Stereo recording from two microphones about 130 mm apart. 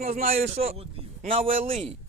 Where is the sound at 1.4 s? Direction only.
90° right.